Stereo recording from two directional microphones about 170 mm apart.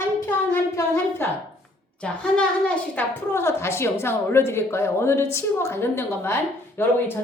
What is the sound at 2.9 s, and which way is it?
A woman's voice, 15° left (ahead or behind).